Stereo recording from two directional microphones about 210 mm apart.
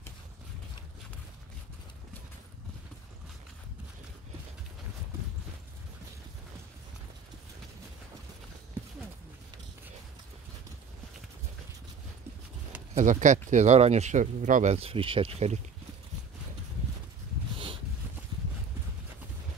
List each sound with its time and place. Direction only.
12.9 s speech: 35° right (ahead or behind)